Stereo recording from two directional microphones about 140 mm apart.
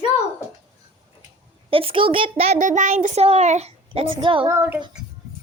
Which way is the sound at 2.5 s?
65° right (ahead or behind).